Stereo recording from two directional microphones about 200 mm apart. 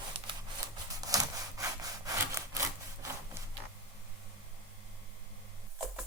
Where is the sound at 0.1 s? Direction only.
25° right (ahead or behind).